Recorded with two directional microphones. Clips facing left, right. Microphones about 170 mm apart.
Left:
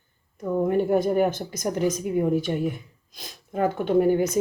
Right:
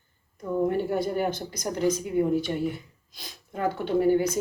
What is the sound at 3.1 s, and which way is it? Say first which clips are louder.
Speech: left 6 dB; 50° left (ahead or behind).